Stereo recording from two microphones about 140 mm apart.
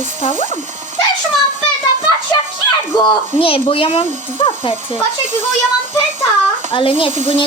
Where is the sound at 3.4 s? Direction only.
40° left (ahead or behind).